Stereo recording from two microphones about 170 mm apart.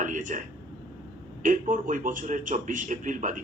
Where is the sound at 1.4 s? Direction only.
50° right (ahead or behind).